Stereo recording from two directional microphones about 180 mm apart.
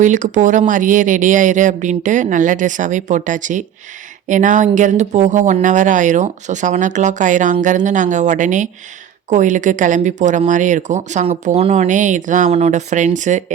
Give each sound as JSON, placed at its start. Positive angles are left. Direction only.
{"t": 0.0, "sound": "speech", "side_deg": -45}